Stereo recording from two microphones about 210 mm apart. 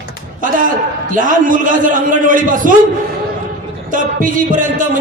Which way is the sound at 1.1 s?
40° right (ahead or behind).